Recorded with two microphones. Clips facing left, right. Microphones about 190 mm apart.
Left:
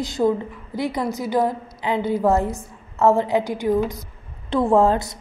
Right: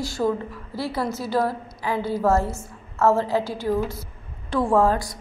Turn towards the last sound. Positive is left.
turn(degrees=25)  # may be behind; listen again after turning